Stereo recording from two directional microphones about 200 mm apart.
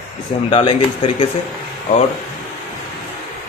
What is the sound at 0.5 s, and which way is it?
Speech, 30° left (ahead or behind).